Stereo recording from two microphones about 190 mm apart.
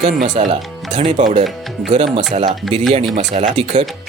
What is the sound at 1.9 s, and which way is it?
Speech, 25° right (ahead or behind).